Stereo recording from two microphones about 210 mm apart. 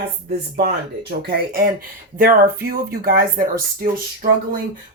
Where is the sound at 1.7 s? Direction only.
40° right (ahead or behind).